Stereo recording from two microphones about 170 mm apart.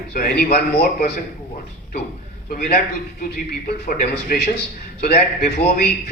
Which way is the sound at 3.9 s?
60° left (ahead or behind).